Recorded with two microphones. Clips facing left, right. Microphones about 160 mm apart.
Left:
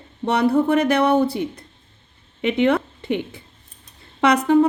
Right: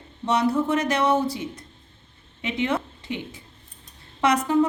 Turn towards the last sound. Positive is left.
turn(degrees=60)  # may be behind; listen again after turning